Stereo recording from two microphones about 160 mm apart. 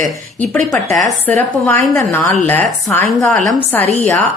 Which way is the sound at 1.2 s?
15° left (ahead or behind).